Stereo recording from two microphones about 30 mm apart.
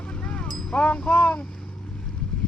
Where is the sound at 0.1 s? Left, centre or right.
Left.